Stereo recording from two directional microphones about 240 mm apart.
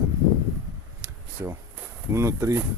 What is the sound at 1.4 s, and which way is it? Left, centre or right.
Speech, centre.